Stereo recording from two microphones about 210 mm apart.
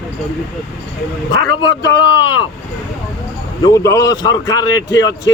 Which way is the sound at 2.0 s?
20° left (ahead or behind).